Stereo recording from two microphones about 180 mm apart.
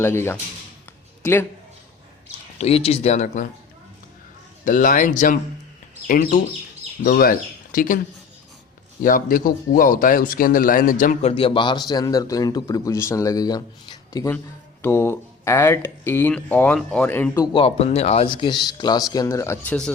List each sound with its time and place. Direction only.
0.0 s speech: 15° left (ahead or behind)
2.6 s speech: 35° left (ahead or behind)
4.6 s speech: 45° left (ahead or behind); by 17.4 s 10° left (ahead or behind)
17.4 s speech: 30° left (ahead or behind)